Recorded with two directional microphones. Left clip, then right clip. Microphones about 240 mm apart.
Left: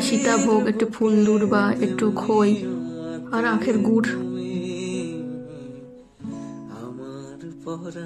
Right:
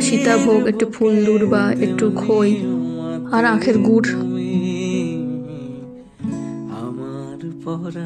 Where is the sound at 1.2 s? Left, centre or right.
Right.